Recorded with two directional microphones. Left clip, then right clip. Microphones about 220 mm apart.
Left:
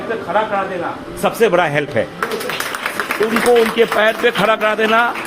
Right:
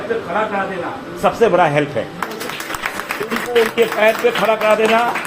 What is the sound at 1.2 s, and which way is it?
Speech, 40° left (ahead or behind).